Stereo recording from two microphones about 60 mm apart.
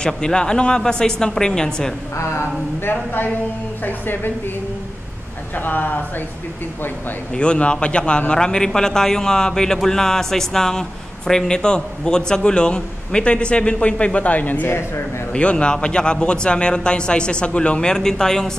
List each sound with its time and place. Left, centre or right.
0.0 s a man's voice: centre
2.1 s speech: left
5.6 s speech: left
7.3 s a man's voice: centre
15.3 s a man's voice: centre